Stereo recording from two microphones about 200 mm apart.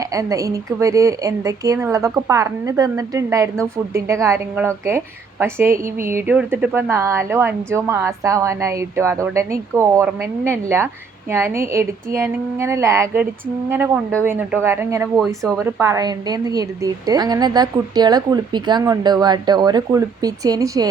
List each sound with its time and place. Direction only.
0.0 s a woman's voice: 15° right (ahead or behind)